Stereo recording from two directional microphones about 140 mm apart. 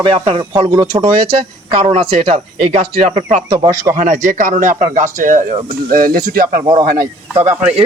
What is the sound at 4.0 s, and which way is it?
Speech, 65° right (ahead or behind).